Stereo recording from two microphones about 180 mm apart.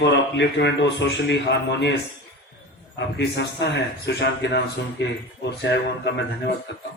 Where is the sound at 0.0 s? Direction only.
75° left (ahead or behind).